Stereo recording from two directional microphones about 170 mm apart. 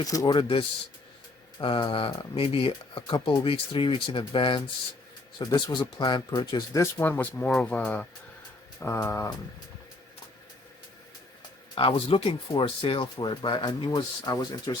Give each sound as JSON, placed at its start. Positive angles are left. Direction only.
{"t": 0.0, "sound": "speech", "side_deg": 20}
{"t": 11.7, "sound": "speech", "side_deg": 30}